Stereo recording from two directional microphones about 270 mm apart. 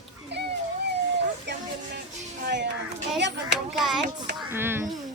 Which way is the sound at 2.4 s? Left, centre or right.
Right.